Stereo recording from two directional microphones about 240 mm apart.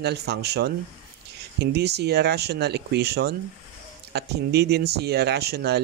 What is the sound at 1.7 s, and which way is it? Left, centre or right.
Speech, right.